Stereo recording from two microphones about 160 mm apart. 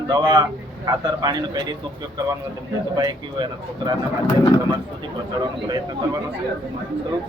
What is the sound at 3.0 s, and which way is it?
Speech, 25° right (ahead or behind).